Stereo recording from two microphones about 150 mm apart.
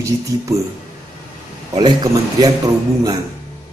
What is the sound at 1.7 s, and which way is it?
Speech, 25° right (ahead or behind).